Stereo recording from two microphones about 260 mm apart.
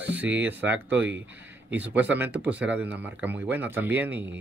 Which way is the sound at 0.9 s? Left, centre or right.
Right.